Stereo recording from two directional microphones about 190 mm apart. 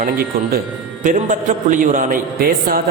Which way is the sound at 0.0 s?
50° right (ahead or behind).